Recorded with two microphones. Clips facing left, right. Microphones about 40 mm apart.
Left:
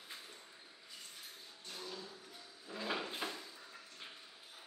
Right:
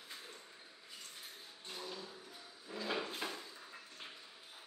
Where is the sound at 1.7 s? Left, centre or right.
Centre.